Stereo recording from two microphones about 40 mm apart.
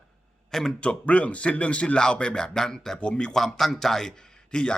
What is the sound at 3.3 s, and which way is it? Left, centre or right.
Speech, centre.